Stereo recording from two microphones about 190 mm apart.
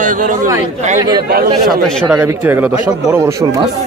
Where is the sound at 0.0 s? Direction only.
45° right (ahead or behind).